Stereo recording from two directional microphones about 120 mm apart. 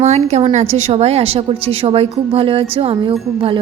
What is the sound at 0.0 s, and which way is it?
A woman's voice, 65° right (ahead or behind).